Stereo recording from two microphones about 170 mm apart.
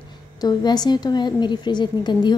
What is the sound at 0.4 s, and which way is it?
A woman's voice, 25° left (ahead or behind).